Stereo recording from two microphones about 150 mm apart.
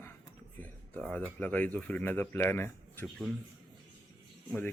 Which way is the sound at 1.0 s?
10° left (ahead or behind).